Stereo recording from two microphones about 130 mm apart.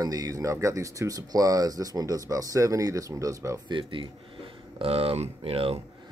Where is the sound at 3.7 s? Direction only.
40° right (ahead or behind).